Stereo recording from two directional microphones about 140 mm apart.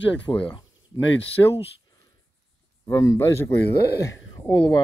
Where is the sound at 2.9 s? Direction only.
20° left (ahead or behind).